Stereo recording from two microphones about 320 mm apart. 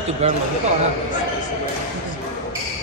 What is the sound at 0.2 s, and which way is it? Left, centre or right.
Speech, centre.